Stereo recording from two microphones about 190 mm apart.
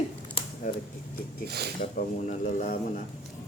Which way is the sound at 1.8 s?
40° left (ahead or behind).